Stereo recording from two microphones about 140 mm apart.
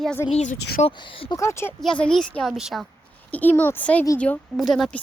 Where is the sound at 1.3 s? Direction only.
20° left (ahead or behind).